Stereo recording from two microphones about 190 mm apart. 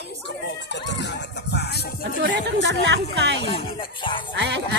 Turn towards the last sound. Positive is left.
turn(degrees=-70)  # may be behind; listen again after turning